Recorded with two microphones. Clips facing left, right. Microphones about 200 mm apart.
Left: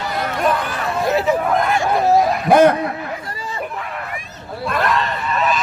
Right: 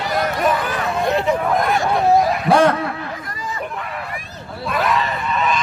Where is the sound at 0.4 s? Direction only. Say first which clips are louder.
Even; centre (ahead or behind).